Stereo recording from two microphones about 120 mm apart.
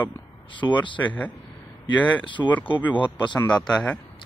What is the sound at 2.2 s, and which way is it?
Speech, 45° left (ahead or behind).